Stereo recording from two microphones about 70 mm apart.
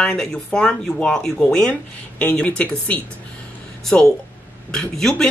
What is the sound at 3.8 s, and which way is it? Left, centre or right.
Speech, centre.